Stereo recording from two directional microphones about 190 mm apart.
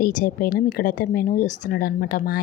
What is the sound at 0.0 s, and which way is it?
A woman's voice, 45° left (ahead or behind).